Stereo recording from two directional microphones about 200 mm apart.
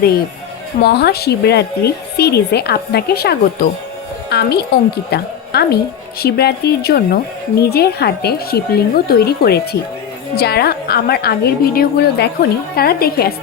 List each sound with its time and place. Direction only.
0.8 s a woman's voice: 55° left (ahead or behind)